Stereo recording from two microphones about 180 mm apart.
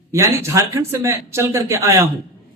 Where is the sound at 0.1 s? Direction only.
15° right (ahead or behind).